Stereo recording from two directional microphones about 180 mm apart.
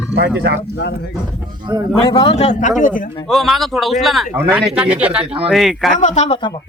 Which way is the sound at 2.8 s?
50° left (ahead or behind).